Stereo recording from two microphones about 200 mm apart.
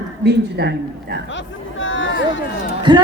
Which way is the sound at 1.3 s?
70° left (ahead or behind).